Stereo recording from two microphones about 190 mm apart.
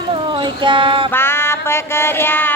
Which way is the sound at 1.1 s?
10° left (ahead or behind).